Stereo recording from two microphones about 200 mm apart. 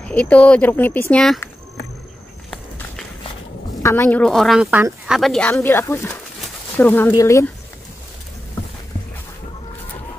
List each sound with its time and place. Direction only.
0.0 s speech: 5° left (ahead or behind)
3.8 s speech: 10° left (ahead or behind)